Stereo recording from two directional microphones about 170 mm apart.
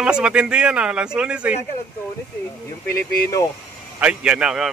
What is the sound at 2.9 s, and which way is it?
Speech, 20° left (ahead or behind).